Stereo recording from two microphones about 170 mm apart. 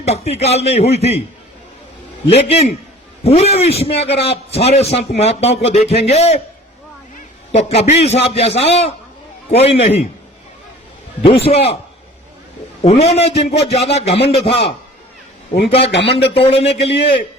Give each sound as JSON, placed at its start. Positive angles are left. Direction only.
{"t": 0.0, "sound": "a man's voice", "side_deg": 40}
{"t": 2.3, "sound": "a man's voice", "side_deg": 35}
{"t": 7.5, "sound": "a man's voice", "side_deg": 40}
{"t": 11.3, "sound": "a man's voice", "side_deg": 35}
{"t": 12.8, "sound": "a man's voice", "side_deg": 35}
{"t": 15.9, "sound": "speech", "side_deg": 90}
{"t": 16.3, "sound": "a man's voice", "side_deg": 35}